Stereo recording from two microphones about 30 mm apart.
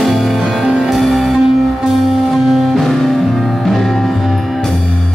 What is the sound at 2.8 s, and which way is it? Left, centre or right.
Music, centre.